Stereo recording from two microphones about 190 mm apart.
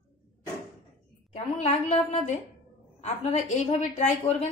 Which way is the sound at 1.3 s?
35° left (ahead or behind).